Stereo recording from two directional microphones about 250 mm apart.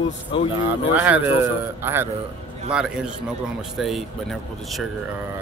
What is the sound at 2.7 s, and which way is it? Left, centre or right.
Speech, centre.